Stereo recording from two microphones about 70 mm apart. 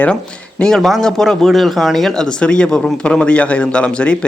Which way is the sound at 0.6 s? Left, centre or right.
Centre.